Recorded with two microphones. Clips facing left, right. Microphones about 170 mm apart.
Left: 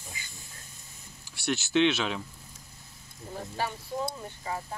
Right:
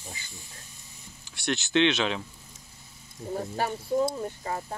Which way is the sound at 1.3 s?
10° left (ahead or behind).